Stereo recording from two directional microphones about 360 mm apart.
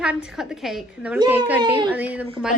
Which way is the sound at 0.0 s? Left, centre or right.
Centre.